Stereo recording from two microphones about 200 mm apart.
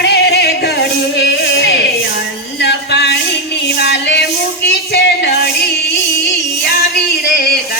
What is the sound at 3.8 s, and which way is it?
Music, 60° left (ahead or behind).